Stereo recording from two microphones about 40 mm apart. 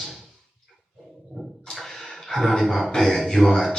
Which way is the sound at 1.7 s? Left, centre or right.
Centre.